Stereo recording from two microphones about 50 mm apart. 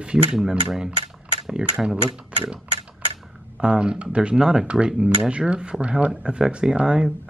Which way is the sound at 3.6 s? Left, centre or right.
Right.